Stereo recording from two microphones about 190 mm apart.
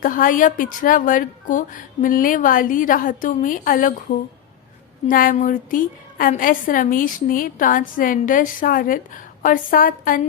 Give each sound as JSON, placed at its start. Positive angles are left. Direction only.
{"t": 0.0, "sound": "a woman's voice", "side_deg": 45}
{"t": 5.0, "sound": "a woman's voice", "side_deg": 50}